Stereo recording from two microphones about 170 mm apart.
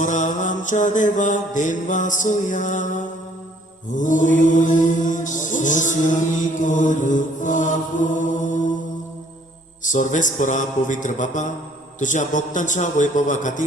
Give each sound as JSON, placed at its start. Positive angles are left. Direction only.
{"t": 0.0, "sound": "music", "side_deg": 50}
{"t": 9.8, "sound": "music", "side_deg": 45}